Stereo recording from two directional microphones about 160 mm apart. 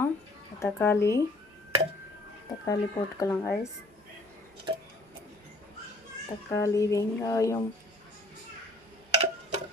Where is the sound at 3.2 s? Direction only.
20° left (ahead or behind).